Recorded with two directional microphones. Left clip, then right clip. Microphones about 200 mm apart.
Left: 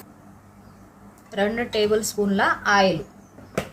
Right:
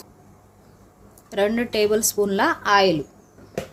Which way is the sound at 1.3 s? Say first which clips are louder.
Right 2 dB; 55° right (ahead or behind).